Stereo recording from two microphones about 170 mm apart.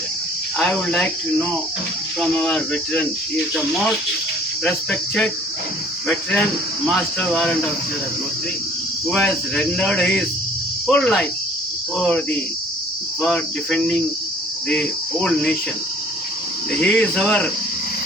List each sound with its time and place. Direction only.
0.6 s speech: 5° left (ahead or behind)
2.2 s speech: 5° left (ahead or behind)
9.0 s speech: 5° left (ahead or behind)
16.8 s speech: 5° left (ahead or behind)